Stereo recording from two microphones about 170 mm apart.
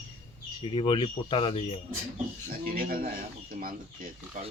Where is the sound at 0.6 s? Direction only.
30° left (ahead or behind).